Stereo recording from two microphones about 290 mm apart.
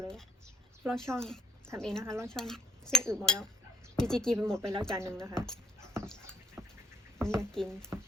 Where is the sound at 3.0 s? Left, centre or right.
Centre.